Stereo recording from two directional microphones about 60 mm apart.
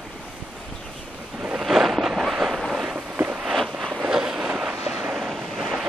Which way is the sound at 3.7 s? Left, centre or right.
Centre.